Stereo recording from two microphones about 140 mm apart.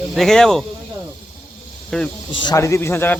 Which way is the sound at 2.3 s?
35° left (ahead or behind).